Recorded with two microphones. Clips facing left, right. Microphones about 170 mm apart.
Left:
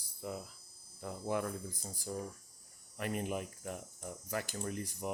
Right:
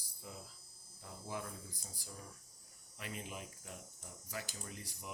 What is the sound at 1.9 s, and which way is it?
Speech, 45° left (ahead or behind).